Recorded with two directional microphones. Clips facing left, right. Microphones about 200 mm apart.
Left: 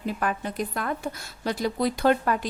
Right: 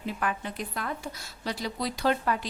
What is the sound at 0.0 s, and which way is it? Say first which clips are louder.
A woman's voice: left 4 dB; 45° left (ahead or behind).